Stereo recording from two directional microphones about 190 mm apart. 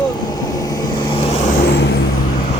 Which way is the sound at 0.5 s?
20° left (ahead or behind).